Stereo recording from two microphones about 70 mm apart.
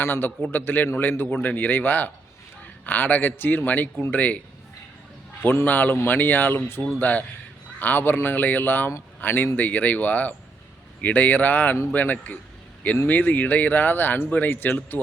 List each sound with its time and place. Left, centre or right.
0.0 s a man's voice: left
5.4 s a man's voice: left